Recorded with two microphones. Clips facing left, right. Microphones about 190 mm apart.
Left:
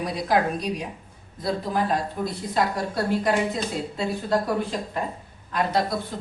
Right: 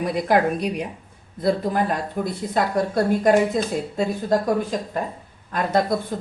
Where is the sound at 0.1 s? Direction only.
55° right (ahead or behind).